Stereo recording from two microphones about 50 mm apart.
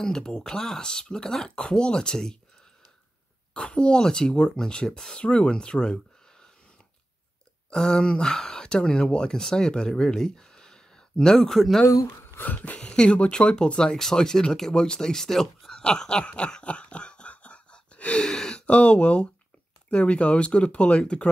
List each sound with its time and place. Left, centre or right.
0.0 s speech: centre
3.5 s speech: centre
7.7 s speech: centre
11.8 s speech: left
12.4 s a sound: left
12.8 s speech: centre
15.8 s a sound: centre
18.2 s speech: centre